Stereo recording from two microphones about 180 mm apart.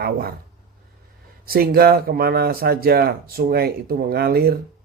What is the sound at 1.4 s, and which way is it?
Speech, 55° right (ahead or behind).